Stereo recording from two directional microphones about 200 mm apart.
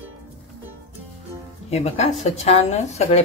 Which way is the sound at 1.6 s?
35° left (ahead or behind).